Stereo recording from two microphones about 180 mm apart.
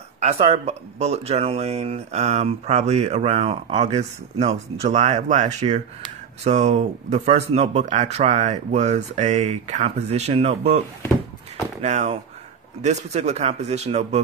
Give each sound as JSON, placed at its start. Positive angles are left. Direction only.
{"t": 0.2, "sound": "speech", "side_deg": -35}
{"t": 11.8, "sound": "speech", "side_deg": -40}